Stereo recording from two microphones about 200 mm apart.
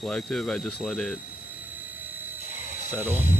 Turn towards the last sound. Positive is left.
turn(degrees=-10)  # may be behind; listen again after turning